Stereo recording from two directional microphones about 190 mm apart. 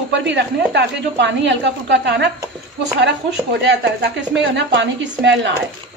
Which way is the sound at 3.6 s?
65° right (ahead or behind).